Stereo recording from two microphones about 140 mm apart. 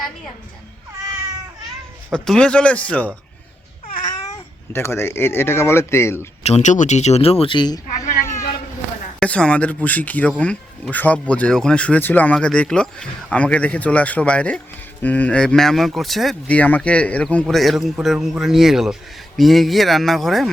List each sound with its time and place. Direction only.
2.1 s speech: 5° left (ahead or behind)
4.7 s speech: 20° left (ahead or behind)
6.4 s a man's voice: 55° left (ahead or behind); by 8.0 s 30° left (ahead or behind)
8.2 s a sound: 20° left (ahead or behind)
9.2 s speech: 10° left (ahead or behind)